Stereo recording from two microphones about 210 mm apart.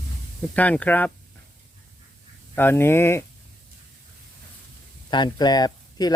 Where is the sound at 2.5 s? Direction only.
10° left (ahead or behind).